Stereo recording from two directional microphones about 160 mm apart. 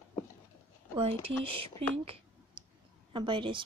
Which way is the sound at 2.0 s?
35° right (ahead or behind).